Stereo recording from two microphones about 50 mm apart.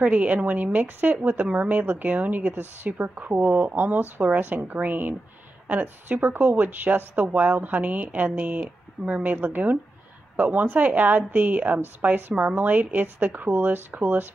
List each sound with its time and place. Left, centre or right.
0.0 s a woman's voice: right